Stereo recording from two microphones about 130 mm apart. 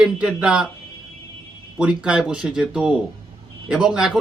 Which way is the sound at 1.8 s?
10° right (ahead or behind).